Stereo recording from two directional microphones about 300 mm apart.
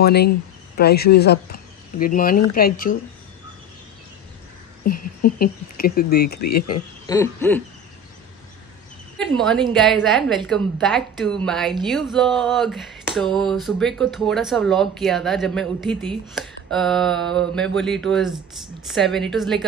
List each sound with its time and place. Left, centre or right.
0.0 s speech: left
4.8 s a woman's voice: left
6.4 s speech: left
7.1 s owl: centre
9.2 s a woman's voice: centre